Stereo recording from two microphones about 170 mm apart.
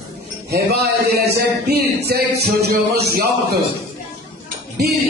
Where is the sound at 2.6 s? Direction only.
70° right (ahead or behind).